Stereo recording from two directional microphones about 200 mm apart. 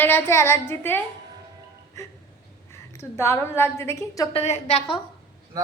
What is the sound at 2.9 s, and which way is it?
A woman's voice, 15° left (ahead or behind).